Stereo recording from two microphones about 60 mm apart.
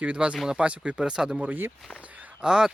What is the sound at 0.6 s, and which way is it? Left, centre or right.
Speech, centre.